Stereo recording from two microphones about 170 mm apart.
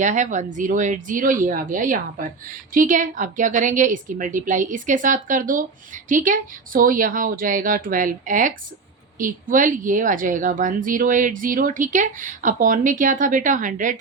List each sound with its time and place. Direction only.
0.0 s speech: 45° right (ahead or behind)